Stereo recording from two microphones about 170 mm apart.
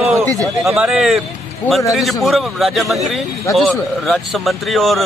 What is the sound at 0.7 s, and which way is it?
Speech, 5° right (ahead or behind).